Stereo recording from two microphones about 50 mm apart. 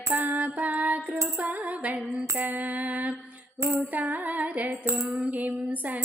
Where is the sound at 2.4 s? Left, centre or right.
Right.